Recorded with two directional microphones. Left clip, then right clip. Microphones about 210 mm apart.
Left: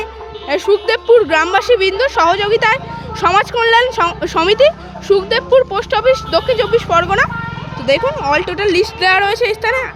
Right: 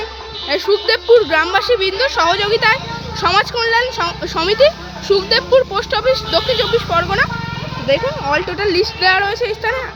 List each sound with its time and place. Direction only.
0.7 s a woman's voice: 15° left (ahead or behind)